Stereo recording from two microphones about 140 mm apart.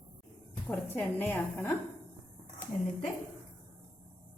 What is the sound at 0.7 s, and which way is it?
A woman's voice, 15° left (ahead or behind).